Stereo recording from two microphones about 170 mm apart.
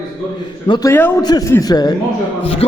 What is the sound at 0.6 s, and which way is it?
Speech, 25° left (ahead or behind).